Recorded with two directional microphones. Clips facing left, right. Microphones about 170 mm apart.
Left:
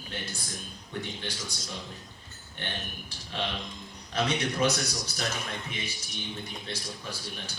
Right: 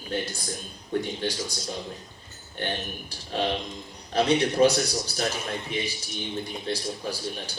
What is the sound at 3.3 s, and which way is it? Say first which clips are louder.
Speech: right 7 dB; 35° right (ahead or behind).